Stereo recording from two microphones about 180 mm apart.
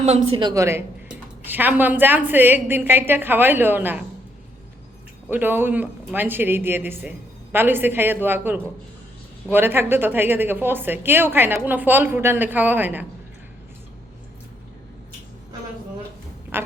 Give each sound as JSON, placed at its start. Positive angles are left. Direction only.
{"t": 0.0, "sound": "a woman's voice", "side_deg": -35}
{"t": 0.4, "sound": "a woman's voice", "side_deg": -15}
{"t": 5.3, "sound": "a woman's voice", "side_deg": -10}
{"t": 16.5, "sound": "quack", "side_deg": -10}